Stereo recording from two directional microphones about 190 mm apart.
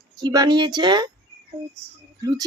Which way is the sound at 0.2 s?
20° right (ahead or behind).